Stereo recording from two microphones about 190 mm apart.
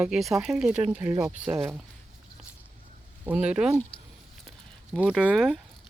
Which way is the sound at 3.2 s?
5° right (ahead or behind).